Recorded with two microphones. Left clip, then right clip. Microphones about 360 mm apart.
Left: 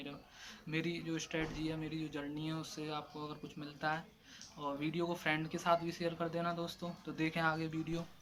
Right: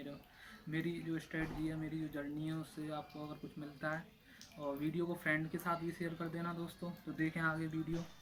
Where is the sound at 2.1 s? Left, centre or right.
Centre.